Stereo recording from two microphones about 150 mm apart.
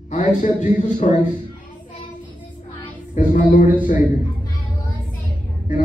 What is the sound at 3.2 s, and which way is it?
Speech, 60° left (ahead or behind).